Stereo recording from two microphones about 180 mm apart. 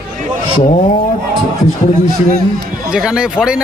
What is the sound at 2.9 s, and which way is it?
Speech, 5° right (ahead or behind).